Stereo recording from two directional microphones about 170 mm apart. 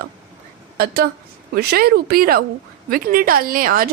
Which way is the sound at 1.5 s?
65° right (ahead or behind).